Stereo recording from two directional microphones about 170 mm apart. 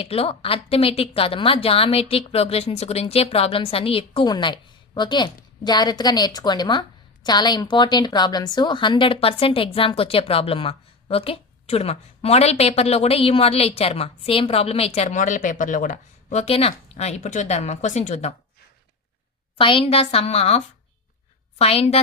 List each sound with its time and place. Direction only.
0.0 s a woman's voice: 35° left (ahead or behind)
19.5 s a woman's voice: 30° left (ahead or behind)